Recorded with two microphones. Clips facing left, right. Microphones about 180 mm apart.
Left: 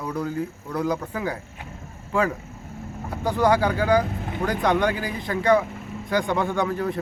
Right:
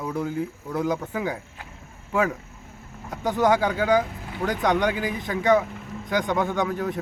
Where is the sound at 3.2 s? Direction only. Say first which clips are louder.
Even; 20° right (ahead or behind).